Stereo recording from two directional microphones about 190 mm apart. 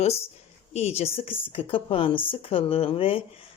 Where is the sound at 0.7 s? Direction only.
35° left (ahead or behind).